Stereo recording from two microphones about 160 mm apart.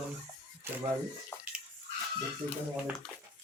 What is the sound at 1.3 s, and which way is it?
Bathtub, 15° left (ahead or behind).